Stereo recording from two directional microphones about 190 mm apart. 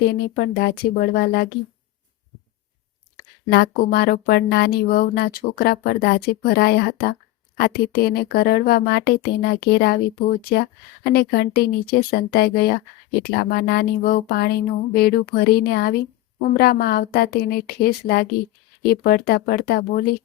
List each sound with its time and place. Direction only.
0.1 s speech: 55° left (ahead or behind)
3.5 s speech: 55° left (ahead or behind)